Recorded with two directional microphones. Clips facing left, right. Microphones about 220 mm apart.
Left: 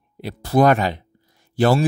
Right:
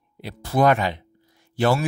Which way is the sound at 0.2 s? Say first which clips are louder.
Left 3 dB; 40° left (ahead or behind).